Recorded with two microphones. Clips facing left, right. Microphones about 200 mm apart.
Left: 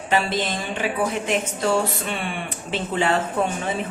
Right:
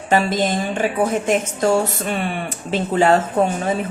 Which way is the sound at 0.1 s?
45° right (ahead or behind).